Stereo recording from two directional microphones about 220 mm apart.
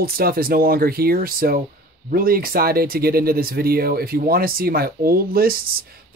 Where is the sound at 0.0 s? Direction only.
40° right (ahead or behind).